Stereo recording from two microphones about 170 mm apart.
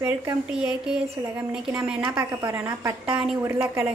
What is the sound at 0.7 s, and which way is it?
A woman's voice, 5° right (ahead or behind).